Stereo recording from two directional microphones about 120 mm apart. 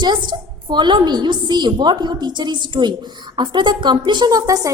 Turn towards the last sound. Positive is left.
turn(degrees=-30)  # may be behind; listen again after turning